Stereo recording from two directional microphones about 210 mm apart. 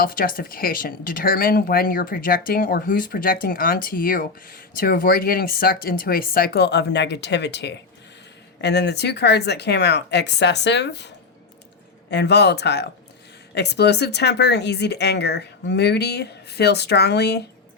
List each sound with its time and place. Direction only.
0.0 s speech: 45° left (ahead or behind)
12.1 s speech: 55° left (ahead or behind)